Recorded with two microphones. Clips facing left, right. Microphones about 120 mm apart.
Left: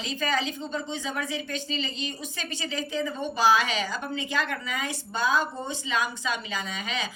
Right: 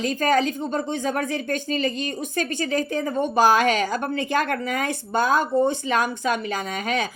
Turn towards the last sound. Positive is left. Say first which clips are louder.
# right 7 dB
turn(degrees=-55)  # may be behind; listen again after turning